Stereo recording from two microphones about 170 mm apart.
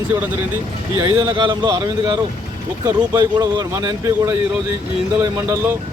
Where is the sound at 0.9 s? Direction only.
20° right (ahead or behind).